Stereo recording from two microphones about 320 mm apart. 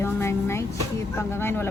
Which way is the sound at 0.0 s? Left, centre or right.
Centre.